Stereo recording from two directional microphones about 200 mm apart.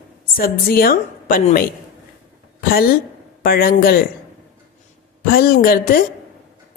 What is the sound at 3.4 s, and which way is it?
Speech, 45° left (ahead or behind).